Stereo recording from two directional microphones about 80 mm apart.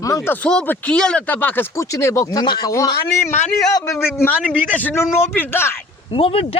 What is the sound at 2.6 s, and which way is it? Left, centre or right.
Speech, left.